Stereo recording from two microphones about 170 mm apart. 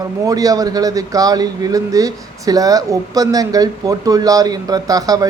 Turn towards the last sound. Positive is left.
turn(degrees=-20)  # may be behind; listen again after turning